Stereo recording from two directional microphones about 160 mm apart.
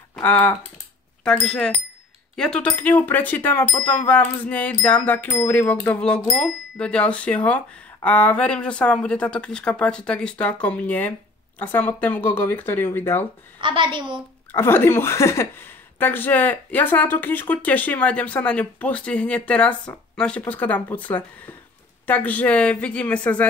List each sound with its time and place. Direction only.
0.1 s speech: 10° left (ahead or behind)
1.2 s chime: 5° left (ahead or behind)
2.3 s speech: 5° left (ahead or behind)
13.6 s a woman's voice: 30° right (ahead or behind)
14.5 s speech: 15° left (ahead or behind)